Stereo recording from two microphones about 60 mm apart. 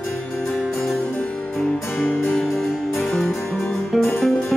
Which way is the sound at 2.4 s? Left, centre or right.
Centre.